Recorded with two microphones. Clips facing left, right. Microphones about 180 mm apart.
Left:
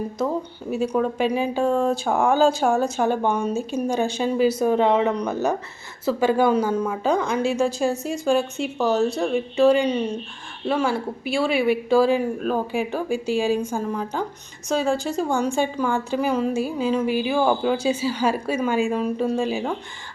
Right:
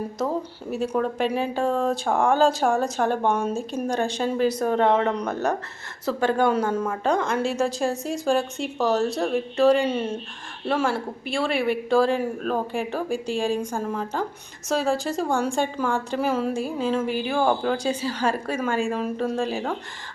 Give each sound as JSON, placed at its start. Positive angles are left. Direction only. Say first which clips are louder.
{"t": 0.2, "sound": "a woman's voice", "louder": "left 1 dB", "side_deg": 0}